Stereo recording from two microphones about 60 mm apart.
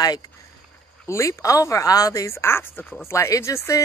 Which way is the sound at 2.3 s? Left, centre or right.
Left.